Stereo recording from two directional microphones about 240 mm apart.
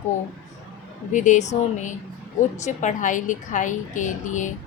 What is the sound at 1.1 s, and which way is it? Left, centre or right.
A woman's voice, left.